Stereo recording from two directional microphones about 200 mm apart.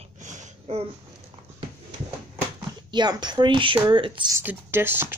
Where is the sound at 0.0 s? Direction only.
35° right (ahead or behind).